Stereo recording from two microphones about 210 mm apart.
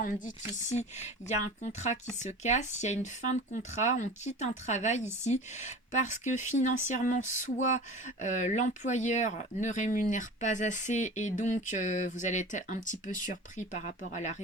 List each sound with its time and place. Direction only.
0.0 s speech: 35° left (ahead or behind)